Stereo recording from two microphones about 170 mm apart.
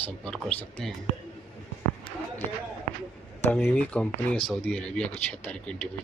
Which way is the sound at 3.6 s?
10° left (ahead or behind).